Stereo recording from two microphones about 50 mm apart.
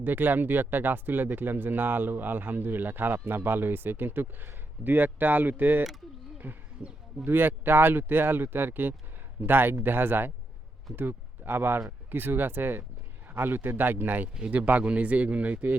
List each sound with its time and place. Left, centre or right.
0.0 s speech: right
14.5 s a man's voice: right